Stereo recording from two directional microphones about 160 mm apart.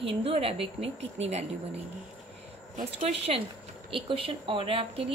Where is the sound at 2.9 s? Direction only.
40° right (ahead or behind).